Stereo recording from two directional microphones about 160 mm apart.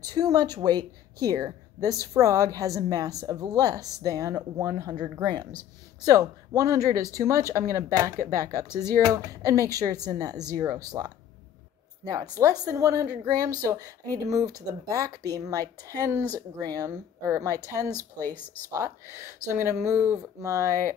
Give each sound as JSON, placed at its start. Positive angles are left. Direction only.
{"t": 0.1, "sound": "speech", "side_deg": -25}
{"t": 18.2, "sound": "speech", "side_deg": 10}
{"t": 18.7, "sound": "speech", "side_deg": -20}